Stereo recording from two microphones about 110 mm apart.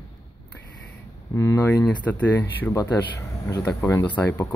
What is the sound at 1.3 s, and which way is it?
Speech, 30° left (ahead or behind).